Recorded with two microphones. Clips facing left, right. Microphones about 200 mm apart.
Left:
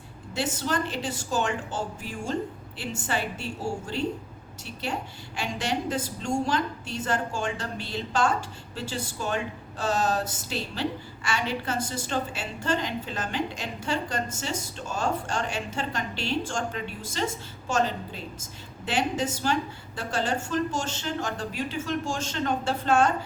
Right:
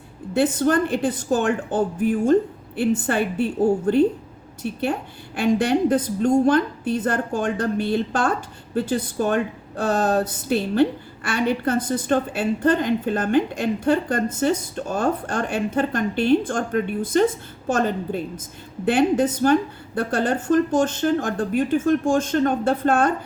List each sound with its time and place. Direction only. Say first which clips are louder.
0.3 s a woman's voice: right 10 dB; 55° right (ahead or behind)